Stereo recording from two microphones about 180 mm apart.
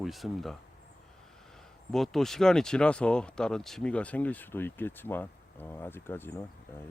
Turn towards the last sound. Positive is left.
turn(degrees=10)  # may be behind; listen again after turning